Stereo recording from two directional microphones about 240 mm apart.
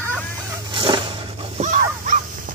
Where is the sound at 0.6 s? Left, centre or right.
Right.